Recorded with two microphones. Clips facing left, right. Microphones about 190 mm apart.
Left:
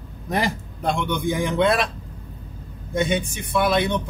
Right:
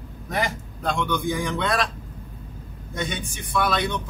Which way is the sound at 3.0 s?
25° left (ahead or behind).